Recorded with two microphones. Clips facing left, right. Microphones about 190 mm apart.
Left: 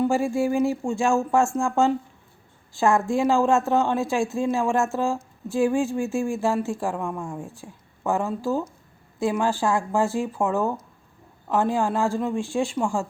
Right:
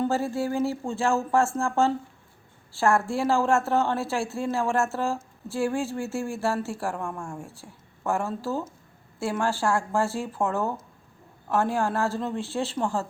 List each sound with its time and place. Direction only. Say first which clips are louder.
0.0 s speech: left 4 dB; 15° left (ahead or behind)